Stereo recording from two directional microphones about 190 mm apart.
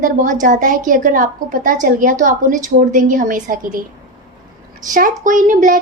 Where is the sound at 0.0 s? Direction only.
45° right (ahead or behind).